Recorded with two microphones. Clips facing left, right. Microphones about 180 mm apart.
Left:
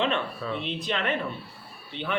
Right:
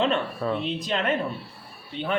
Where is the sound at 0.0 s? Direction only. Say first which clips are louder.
Right 3 dB; 40° right (ahead or behind).